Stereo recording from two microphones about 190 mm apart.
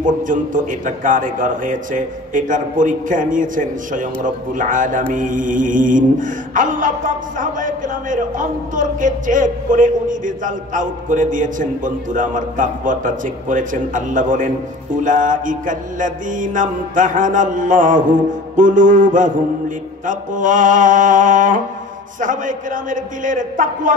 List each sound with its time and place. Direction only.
0.0 s a man's voice: 45° right (ahead or behind)